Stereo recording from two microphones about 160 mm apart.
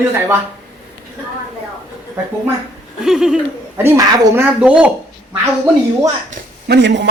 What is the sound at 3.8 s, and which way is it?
Speech, 20° right (ahead or behind).